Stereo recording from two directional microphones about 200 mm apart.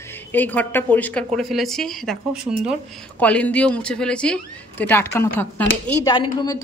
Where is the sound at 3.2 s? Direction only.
5° left (ahead or behind).